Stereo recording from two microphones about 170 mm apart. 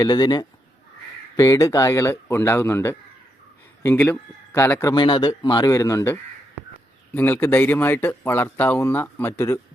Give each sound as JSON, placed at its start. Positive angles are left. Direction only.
{"t": 0.0, "sound": "speech", "side_deg": 25}